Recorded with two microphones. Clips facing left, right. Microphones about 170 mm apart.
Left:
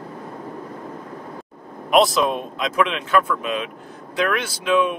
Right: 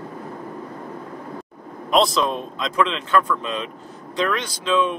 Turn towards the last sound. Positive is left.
turn(degrees=15)  # may be behind; listen again after turning